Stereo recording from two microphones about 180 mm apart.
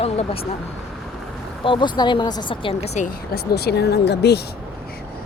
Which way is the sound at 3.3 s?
65° left (ahead or behind).